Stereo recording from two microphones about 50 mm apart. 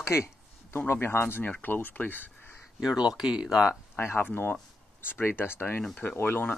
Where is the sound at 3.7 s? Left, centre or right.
Left.